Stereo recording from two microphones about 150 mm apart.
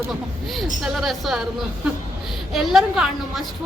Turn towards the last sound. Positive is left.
turn(degrees=0)  # may be behind; listen again after turning